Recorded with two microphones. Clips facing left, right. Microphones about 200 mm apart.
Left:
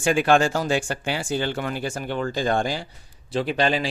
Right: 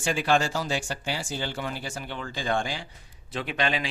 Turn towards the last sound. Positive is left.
turn(degrees=35)  # may be behind; listen again after turning